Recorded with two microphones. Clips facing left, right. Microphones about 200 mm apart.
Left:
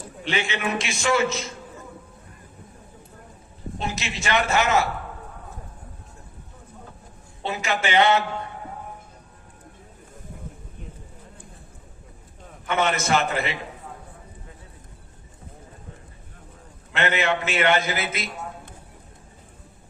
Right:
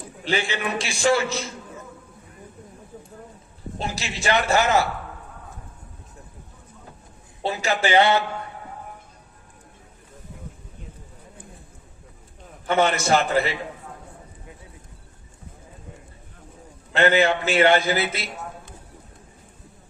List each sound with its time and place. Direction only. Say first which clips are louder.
0.3 s a man's voice: right 1 dB; 35° right (ahead or behind)
3.8 s a man's voice: even; 35° right (ahead or behind)
7.4 s a man's voice: right 3 dB; 35° right (ahead or behind)
12.6 s a man's voice: right 3 dB; 35° right (ahead or behind)
16.9 s a man's voice: right 5 dB; 35° right (ahead or behind)